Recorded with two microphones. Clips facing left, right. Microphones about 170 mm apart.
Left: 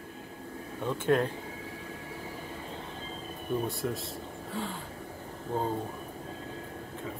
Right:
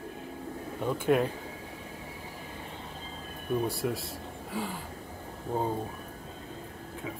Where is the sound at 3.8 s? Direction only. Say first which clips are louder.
Right 2 dB; 10° right (ahead or behind).